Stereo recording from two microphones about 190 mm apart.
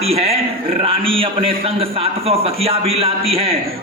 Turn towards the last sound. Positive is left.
turn(degrees=-30)  # may be behind; listen again after turning